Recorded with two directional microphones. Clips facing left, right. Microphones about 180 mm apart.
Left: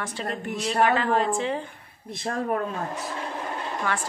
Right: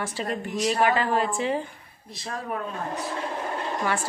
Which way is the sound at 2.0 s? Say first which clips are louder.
Left 6 dB; 50° left (ahead or behind).